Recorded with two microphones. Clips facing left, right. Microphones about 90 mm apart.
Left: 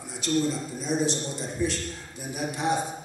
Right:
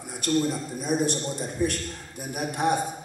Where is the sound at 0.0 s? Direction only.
55° right (ahead or behind).